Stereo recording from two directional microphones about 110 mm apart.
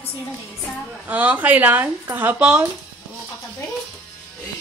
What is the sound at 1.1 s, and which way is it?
Speech, 15° right (ahead or behind).